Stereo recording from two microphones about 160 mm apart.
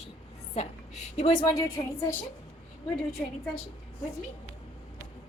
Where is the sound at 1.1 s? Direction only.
40° left (ahead or behind).